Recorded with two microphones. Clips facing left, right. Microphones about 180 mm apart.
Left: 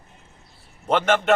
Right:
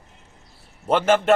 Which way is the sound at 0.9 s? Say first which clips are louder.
Right 1 dB; 5° right (ahead or behind).